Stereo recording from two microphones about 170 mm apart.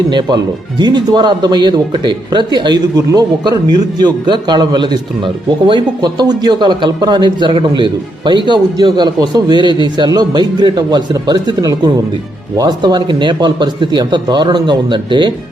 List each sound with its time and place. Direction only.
0.1 s speech: 25° right (ahead or behind)